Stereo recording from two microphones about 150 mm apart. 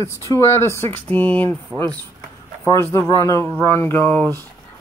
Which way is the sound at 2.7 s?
20° left (ahead or behind).